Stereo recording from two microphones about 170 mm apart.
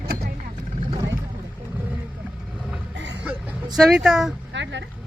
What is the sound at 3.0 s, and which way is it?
Music, 90° right.